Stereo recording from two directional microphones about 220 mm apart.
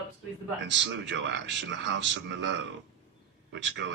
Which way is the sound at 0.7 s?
55° right (ahead or behind).